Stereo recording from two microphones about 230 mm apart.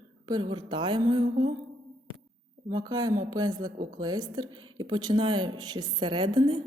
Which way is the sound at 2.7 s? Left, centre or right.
Centre.